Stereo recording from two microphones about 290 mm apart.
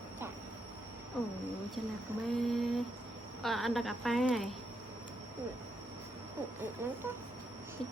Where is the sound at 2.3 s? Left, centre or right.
Centre.